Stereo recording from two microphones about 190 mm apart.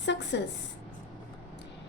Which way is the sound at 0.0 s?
65° left (ahead or behind).